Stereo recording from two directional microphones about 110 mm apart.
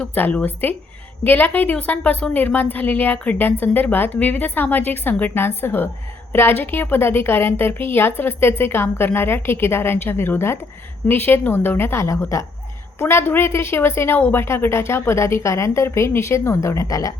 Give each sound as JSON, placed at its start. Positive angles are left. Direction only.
{"t": 0.0, "sound": "a woman's voice", "side_deg": 15}